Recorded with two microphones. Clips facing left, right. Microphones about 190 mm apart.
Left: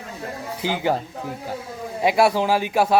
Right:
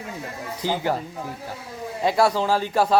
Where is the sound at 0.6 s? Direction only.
15° left (ahead or behind).